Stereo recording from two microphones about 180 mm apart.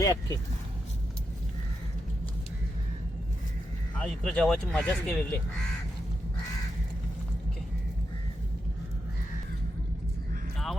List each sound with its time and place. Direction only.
0.0 s speech: 20° left (ahead or behind)
4.0 s speech: 5° left (ahead or behind)